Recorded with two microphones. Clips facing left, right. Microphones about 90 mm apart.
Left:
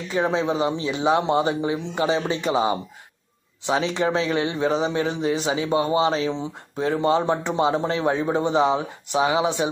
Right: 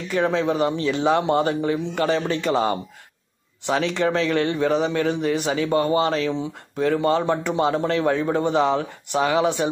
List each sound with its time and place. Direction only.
0.1 s a man's voice: 20° left (ahead or behind)